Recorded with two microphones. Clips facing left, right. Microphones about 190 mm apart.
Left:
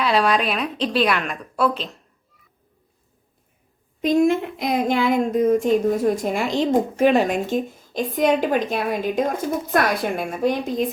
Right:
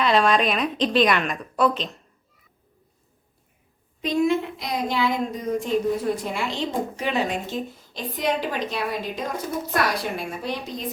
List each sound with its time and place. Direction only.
0.0 s a woman's voice: 5° left (ahead or behind)
4.0 s speech: 45° left (ahead or behind)